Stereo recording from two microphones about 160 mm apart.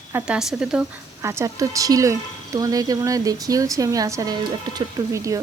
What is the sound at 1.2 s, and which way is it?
Speech, 15° right (ahead or behind).